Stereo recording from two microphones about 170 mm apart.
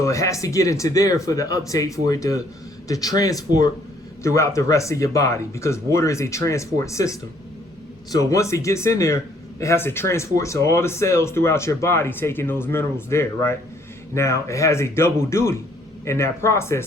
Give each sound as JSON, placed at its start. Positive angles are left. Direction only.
{"t": 0.0, "sound": "speech", "side_deg": 20}